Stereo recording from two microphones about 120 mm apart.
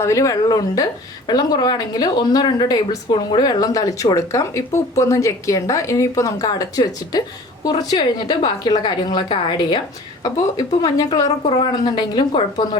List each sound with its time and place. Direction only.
0.0 s a woman's voice: 25° left (ahead or behind); by 12.8 s 40° left (ahead or behind)